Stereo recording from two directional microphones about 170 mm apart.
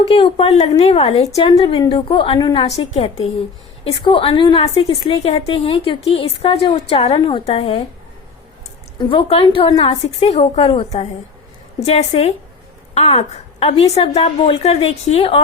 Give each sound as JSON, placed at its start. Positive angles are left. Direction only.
{"t": 0.1, "sound": "a woman's voice", "side_deg": 35}
{"t": 9.0, "sound": "a woman's voice", "side_deg": 30}